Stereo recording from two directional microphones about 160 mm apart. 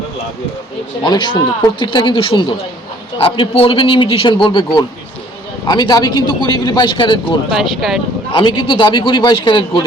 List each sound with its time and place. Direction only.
1.0 s a man's voice: 30° left (ahead or behind)
7.5 s speech: centre (ahead or behind)
8.3 s a man's voice: 30° left (ahead or behind)